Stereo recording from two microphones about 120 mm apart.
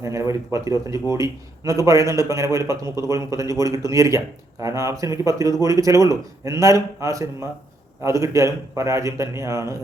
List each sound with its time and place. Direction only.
0.0 s a man's voice: 25° right (ahead or behind)